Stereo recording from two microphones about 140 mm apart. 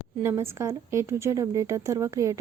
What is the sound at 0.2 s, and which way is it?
A woman's voice, 15° right (ahead or behind).